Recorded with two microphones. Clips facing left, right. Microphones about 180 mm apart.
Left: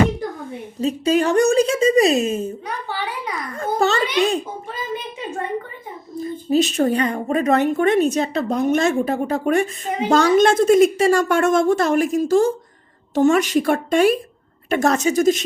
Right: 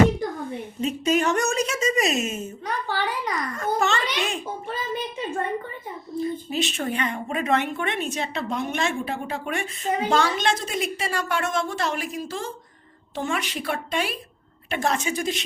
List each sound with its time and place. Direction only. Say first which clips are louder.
0.8 s speech: left 5 dB; 35° left (ahead or behind)
3.6 s speech: left 6 dB; 35° left (ahead or behind)
6.1 s a woman's voice: left 7 dB; 40° left (ahead or behind)